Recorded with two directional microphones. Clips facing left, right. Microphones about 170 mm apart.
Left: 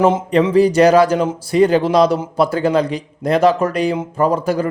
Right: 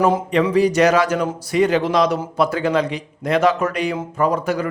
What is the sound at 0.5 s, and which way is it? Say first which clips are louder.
Speech: left 5 dB; 30° left (ahead or behind).